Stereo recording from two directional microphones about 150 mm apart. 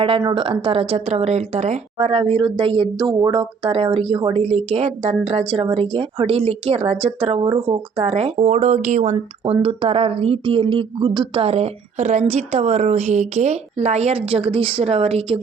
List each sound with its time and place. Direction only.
0.0 s a woman's voice: 35° right (ahead or behind); by 9.1 s 50° right (ahead or behind)
9.1 s a woman's voice: 40° right (ahead or behind)
11.4 s a woman's voice: 45° right (ahead or behind)